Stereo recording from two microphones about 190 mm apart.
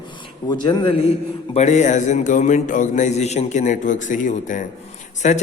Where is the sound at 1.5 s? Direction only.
35° left (ahead or behind).